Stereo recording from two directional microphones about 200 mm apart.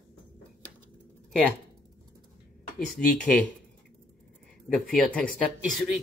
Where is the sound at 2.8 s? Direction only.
5° left (ahead or behind).